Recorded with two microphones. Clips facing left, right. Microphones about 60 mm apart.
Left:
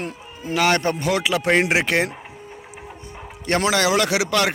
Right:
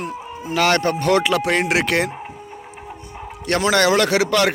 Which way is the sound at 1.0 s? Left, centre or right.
Centre.